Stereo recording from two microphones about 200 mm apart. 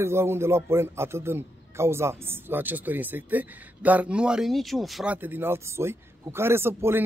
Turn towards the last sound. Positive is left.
turn(degrees=-10)  # may be behind; listen again after turning